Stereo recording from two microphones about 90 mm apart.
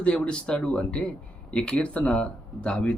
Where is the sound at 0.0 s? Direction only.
10° left (ahead or behind).